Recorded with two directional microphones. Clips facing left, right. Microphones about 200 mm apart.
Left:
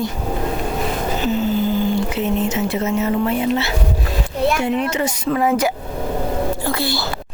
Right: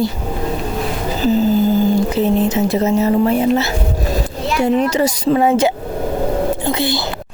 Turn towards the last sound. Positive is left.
turn(degrees=-20)  # may be behind; listen again after turning